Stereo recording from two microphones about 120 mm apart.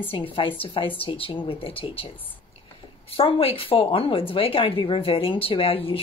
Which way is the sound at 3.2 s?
50° left (ahead or behind).